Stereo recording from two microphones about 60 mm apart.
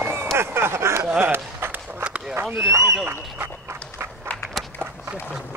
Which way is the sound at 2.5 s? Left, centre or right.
Right.